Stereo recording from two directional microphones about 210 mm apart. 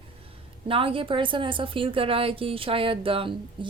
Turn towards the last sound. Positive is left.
turn(degrees=-25)  # may be behind; listen again after turning